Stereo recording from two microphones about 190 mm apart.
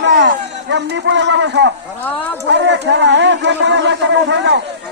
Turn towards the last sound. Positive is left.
turn(degrees=-65)  # may be behind; listen again after turning